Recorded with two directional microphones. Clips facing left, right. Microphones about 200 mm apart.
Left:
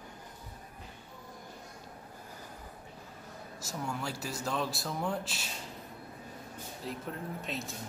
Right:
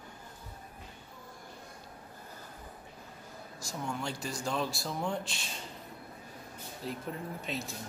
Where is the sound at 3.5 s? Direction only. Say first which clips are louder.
Even; 5° left (ahead or behind).